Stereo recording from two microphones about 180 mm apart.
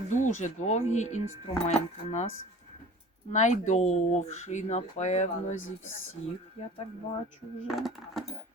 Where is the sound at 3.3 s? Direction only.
40° left (ahead or behind).